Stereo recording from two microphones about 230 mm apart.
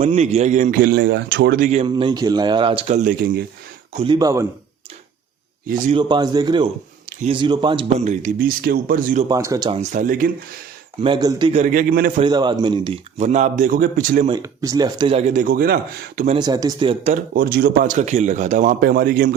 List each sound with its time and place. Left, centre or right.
0.0 s a man's voice: right
3.9 s speech: right
5.9 s a man's voice: centre; by 9.2 s right
9.3 s speech: centre
9.9 s a man's voice: right
11.0 s a man's voice: centre
11.6 s a man's voice: right
12.2 s a man's voice: centre; by 14.3 s right
14.3 s a man's voice: centre; by 16.3 s right
16.3 s a man's voice: centre
17.3 s a man's voice: right